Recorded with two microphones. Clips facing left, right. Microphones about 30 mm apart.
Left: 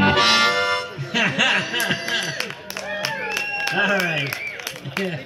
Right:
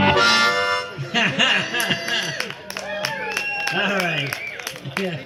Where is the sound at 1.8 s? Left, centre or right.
Centre.